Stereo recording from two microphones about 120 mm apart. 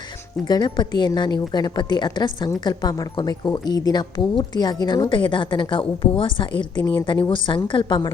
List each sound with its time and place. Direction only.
0.4 s a woman's voice: 35° left (ahead or behind)